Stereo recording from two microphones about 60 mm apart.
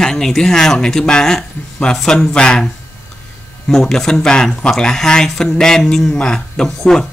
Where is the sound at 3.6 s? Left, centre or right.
Centre.